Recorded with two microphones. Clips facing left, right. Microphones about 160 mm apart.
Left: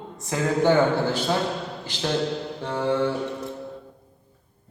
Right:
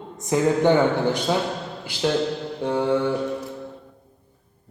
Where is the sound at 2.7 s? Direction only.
15° right (ahead or behind).